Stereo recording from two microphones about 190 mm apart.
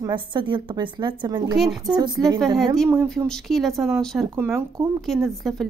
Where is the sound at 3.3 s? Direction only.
Centre (ahead or behind).